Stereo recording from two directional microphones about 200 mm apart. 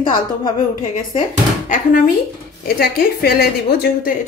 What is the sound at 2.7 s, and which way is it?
A woman's voice, 50° left (ahead or behind).